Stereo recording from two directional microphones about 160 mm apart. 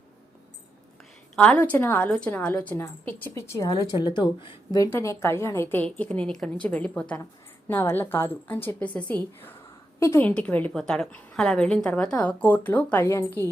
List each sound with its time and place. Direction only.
1.4 s a woman's voice: 10° left (ahead or behind)
4.0 s speech: 30° left (ahead or behind)
4.8 s a woman's voice: 20° left (ahead or behind)